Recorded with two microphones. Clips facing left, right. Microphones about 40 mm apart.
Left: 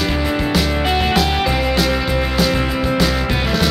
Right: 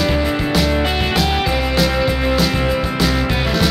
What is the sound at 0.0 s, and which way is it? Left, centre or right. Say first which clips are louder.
Music: right 1 dB; centre.